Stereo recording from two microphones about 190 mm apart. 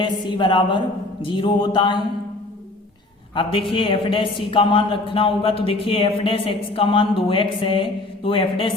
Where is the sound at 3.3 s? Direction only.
25° left (ahead or behind).